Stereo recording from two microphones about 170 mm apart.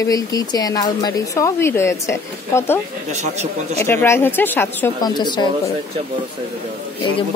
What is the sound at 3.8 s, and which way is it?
A woman's voice, 15° left (ahead or behind).